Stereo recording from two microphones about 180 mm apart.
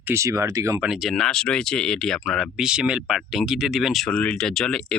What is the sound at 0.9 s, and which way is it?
Speech, centre (ahead or behind).